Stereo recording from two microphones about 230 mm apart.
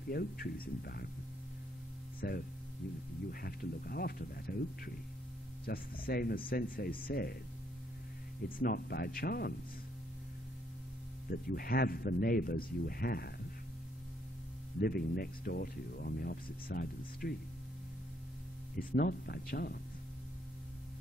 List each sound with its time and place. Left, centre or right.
0.1 s speech: left
2.1 s speech: left
8.5 s speech: left
11.2 s speech: left
14.8 s speech: left
18.8 s speech: left